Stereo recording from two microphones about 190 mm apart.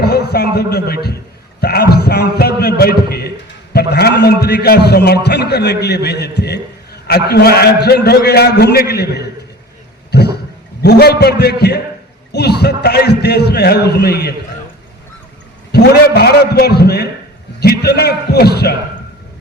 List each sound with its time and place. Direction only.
0.0 s a man's voice: 60° left (ahead or behind)
10.1 s a sound: 60° left (ahead or behind)
10.8 s a man's voice: 60° left (ahead or behind)
15.7 s a man's voice: 55° left (ahead or behind)